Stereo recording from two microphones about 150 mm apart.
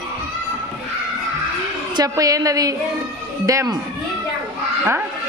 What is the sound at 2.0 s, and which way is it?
A woman's voice, 25° right (ahead or behind).